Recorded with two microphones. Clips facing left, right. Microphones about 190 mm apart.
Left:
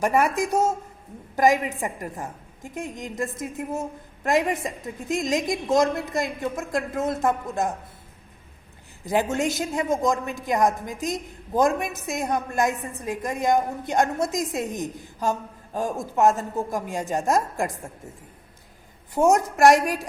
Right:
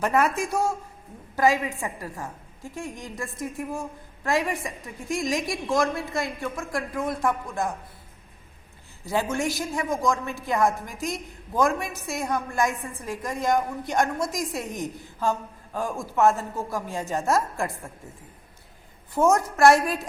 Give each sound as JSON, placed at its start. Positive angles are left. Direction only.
{"t": 0.0, "sound": "a woman's voice", "side_deg": 10}
{"t": 9.3, "sound": "a woman's voice", "side_deg": 20}
{"t": 19.1, "sound": "speech", "side_deg": 15}